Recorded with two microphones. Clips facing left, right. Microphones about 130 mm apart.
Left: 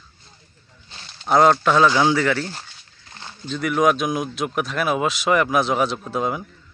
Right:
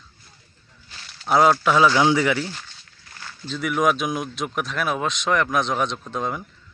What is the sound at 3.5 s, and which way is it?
Speech, centre (ahead or behind).